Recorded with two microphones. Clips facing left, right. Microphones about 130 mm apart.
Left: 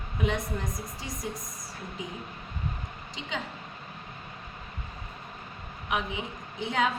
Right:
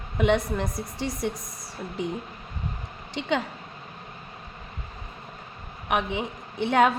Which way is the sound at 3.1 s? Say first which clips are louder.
Right 10 dB; 70° right (ahead or behind).